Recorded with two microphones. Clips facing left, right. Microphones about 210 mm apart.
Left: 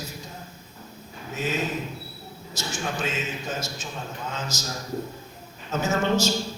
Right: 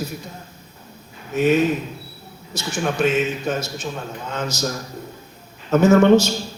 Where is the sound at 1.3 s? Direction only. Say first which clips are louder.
Right 12 dB; 60° right (ahead or behind).